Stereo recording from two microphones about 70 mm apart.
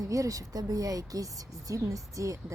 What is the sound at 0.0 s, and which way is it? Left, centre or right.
A woman's voice, right.